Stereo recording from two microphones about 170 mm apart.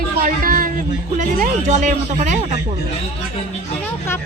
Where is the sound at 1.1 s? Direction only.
50° right (ahead or behind).